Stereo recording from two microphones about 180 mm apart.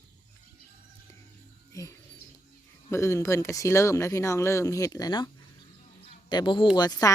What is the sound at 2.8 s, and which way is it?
Speech, 15° left (ahead or behind).